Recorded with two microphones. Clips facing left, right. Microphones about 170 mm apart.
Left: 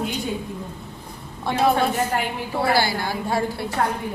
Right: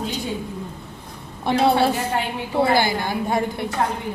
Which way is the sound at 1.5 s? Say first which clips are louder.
Right 2 dB; 30° right (ahead or behind).